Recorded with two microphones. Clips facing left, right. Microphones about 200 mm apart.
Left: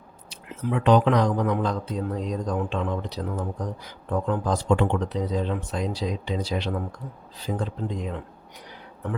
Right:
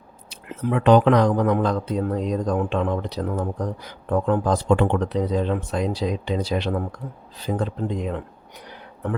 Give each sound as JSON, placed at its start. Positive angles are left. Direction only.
{"t": 0.3, "sound": "speech", "side_deg": -60}